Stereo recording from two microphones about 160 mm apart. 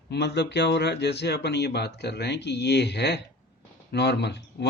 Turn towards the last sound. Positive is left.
turn(degrees=90)